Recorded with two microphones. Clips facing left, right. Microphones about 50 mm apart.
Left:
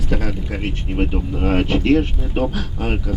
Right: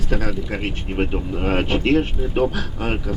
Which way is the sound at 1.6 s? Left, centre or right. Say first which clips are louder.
Left 2 dB; right.